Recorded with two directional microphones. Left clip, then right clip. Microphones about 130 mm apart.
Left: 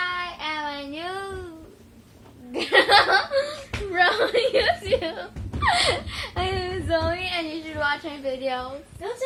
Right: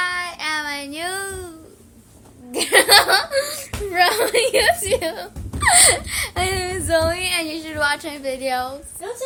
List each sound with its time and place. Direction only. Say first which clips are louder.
0.0 s child singing: right 4 dB; 30° right (ahead or behind)
2.5 s laughter: right 4 dB; 30° right (ahead or behind)
3.9 s a woman's voice: right 3 dB; 20° right (ahead or behind)